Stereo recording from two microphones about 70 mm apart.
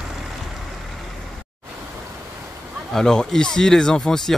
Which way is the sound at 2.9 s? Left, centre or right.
Centre.